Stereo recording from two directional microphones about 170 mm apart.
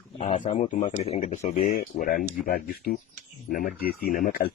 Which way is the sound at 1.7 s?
55° left (ahead or behind).